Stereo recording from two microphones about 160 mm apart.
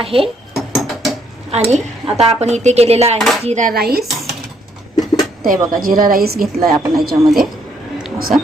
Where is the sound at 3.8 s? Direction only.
80° right.